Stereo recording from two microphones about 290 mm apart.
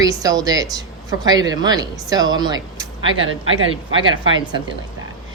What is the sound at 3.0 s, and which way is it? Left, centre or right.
Speech, right.